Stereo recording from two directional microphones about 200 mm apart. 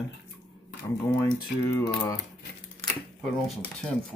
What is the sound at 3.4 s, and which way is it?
Speech, 5° left (ahead or behind).